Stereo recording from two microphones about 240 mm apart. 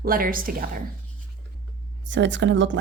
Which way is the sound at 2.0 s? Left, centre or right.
Right.